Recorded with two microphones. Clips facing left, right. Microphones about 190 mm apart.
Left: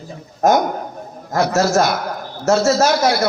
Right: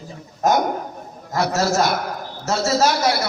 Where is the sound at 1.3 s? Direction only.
50° left (ahead or behind).